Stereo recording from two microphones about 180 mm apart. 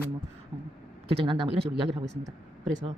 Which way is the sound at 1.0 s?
30° right (ahead or behind).